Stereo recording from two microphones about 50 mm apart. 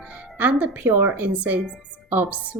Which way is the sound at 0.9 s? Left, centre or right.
Right.